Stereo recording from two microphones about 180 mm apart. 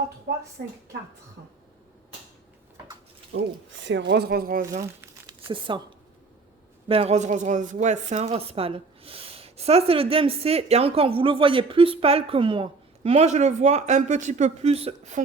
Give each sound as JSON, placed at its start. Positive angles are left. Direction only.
{"t": 0.3, "sound": "speech", "side_deg": -70}
{"t": 3.3, "sound": "speech", "side_deg": -90}
{"t": 4.9, "sound": "crumpling", "side_deg": -15}
{"t": 5.5, "sound": "speech", "side_deg": -30}
{"t": 6.8, "sound": "a woman's voice", "side_deg": -30}